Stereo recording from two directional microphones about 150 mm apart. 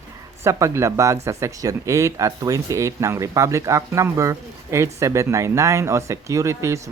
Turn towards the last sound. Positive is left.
turn(degrees=-20)  # may be behind; listen again after turning